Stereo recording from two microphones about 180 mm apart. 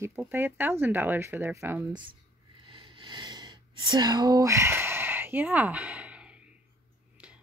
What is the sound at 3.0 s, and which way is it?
Snort, 25° right (ahead or behind).